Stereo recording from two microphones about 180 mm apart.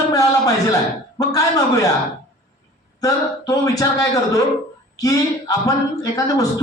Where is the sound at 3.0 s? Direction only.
20° left (ahead or behind).